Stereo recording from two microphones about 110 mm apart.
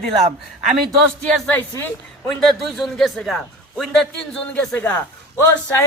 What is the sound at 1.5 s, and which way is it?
Speech, 20° left (ahead or behind).